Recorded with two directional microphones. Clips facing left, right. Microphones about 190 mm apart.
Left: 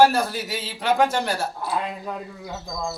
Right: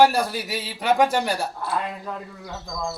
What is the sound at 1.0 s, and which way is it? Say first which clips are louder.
Speech: right 1 dB; 15° right (ahead or behind).